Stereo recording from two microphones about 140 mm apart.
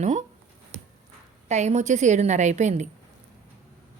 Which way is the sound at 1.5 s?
55° right (ahead or behind).